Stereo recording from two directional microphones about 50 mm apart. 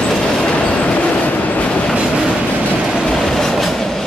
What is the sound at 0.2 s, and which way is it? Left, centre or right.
Train, centre.